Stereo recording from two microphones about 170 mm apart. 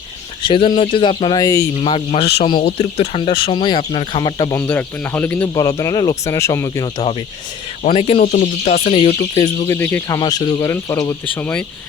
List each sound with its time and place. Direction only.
0.4 s speech: 30° left (ahead or behind)
7.9 s speech: 35° left (ahead or behind)
9.6 s speech: 10° left (ahead or behind)